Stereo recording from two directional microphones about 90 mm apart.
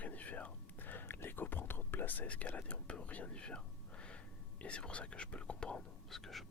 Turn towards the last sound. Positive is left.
turn(degrees=0)  # may be behind; listen again after turning